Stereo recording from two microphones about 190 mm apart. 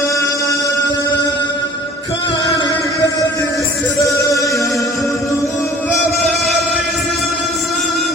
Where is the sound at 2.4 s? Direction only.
20° left (ahead or behind).